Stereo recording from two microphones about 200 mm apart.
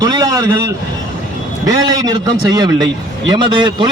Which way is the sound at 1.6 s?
20° right (ahead or behind).